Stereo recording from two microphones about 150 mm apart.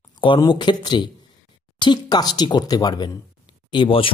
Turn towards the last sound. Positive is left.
turn(degrees=35)  # may be behind; listen again after turning